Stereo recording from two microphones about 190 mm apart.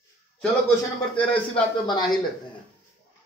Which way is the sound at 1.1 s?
25° left (ahead or behind).